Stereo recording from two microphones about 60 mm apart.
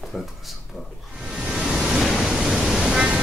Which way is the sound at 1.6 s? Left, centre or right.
Centre.